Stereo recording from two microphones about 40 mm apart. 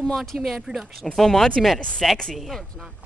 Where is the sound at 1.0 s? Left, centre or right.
Centre.